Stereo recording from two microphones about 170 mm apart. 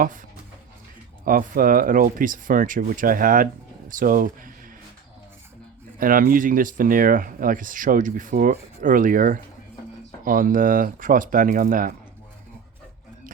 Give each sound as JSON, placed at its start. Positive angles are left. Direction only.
{"t": 1.2, "sound": "speech", "side_deg": -55}
{"t": 6.0, "sound": "speech", "side_deg": -55}